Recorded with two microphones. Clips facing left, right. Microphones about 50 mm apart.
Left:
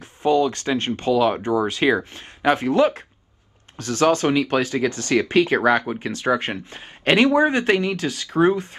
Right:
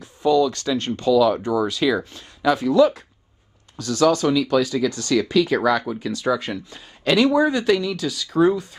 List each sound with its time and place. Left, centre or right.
0.0 s speech: left